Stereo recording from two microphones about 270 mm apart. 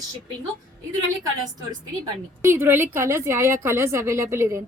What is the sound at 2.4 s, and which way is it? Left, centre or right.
A woman's voice, centre.